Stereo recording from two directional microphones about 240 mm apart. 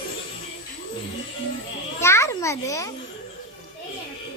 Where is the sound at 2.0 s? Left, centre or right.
Centre.